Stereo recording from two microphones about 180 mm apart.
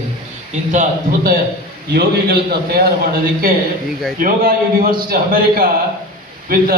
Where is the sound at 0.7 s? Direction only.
45° right (ahead or behind).